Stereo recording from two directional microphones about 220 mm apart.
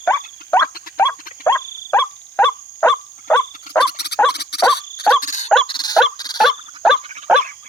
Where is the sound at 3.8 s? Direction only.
50° left (ahead or behind).